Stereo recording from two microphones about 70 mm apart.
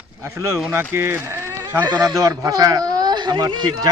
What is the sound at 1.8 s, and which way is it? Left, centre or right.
Speech, right.